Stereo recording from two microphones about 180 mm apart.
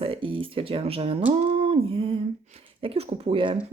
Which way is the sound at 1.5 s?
30° right (ahead or behind).